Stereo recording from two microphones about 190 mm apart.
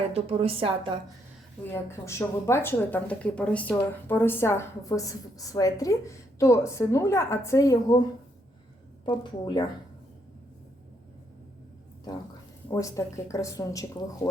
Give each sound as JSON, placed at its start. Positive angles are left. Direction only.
{"t": 0.1, "sound": "a woman's voice", "side_deg": -30}
{"t": 1.7, "sound": "speech", "side_deg": 15}
{"t": 9.0, "sound": "speech", "side_deg": 25}
{"t": 12.7, "sound": "speech", "side_deg": 15}